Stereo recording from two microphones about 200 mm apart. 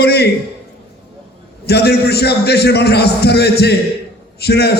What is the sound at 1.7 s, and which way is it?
A man's voice, 55° left (ahead or behind).